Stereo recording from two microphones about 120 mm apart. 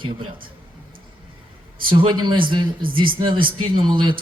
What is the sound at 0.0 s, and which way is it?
Speech, 45° right (ahead or behind).